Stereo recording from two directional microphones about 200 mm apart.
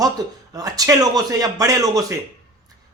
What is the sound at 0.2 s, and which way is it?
Speech, 20° right (ahead or behind).